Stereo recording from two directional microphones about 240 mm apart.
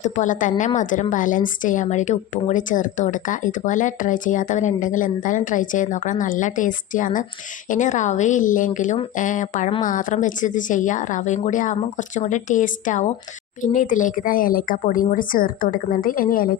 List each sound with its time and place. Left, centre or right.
0.0 s a woman's voice: left